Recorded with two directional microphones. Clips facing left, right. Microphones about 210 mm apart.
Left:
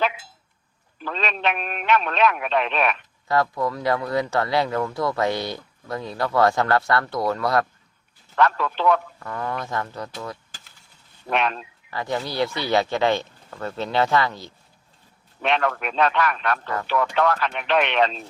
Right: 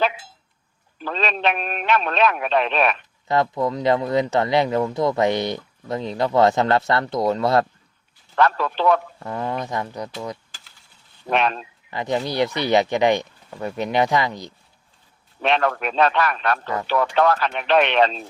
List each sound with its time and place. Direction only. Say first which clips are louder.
1.0 s speech: right 3 dB; 35° right (ahead or behind)
3.2 s speech: right 2 dB; 20° right (ahead or behind)
11.3 s speech: right 3 dB; 35° right (ahead or behind)
11.9 s speech: right 3 dB; 20° right (ahead or behind)
15.4 s speech: right 2 dB; 35° right (ahead or behind)